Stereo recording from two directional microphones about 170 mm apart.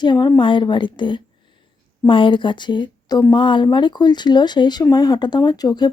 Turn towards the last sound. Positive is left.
turn(degrees=25)  # may be behind; listen again after turning